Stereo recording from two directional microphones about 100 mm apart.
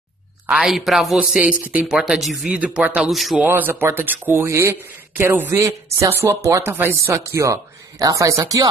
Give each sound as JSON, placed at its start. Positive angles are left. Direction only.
{"t": 0.5, "sound": "a man's voice", "side_deg": -5}
{"t": 1.4, "sound": "speech", "side_deg": -15}
{"t": 1.9, "sound": "speech", "side_deg": -5}
{"t": 3.0, "sound": "a man's voice", "side_deg": 0}
{"t": 3.3, "sound": "speech", "side_deg": -20}